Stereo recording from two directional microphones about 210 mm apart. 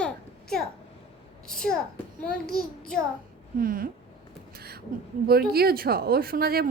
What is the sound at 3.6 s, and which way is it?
Speech, 40° right (ahead or behind).